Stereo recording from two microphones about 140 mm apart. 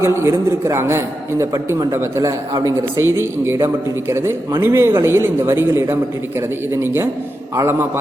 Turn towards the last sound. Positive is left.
turn(degrees=-20)  # may be behind; listen again after turning